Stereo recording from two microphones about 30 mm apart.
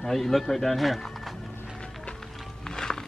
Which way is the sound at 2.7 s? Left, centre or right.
Left.